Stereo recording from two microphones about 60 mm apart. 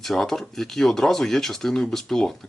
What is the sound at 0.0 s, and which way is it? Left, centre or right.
Speech, centre.